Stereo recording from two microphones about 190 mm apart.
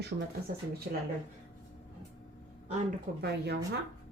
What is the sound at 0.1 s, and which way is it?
Speech, 90° right.